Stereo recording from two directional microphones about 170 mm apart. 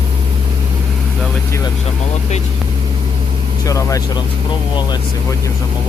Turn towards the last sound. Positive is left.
turn(degrees=20)  # may be behind; listen again after turning